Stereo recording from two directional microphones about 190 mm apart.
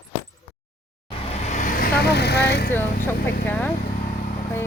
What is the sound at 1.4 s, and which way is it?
Vehicle, 40° left (ahead or behind).